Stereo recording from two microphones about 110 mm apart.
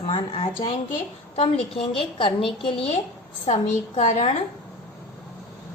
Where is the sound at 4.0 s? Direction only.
85° left.